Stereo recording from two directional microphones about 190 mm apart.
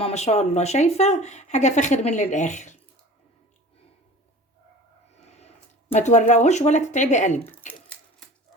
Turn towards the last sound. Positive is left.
turn(degrees=40)  # may be behind; listen again after turning